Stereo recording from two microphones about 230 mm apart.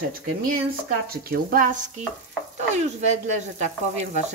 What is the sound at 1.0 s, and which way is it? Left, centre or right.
Stir, right.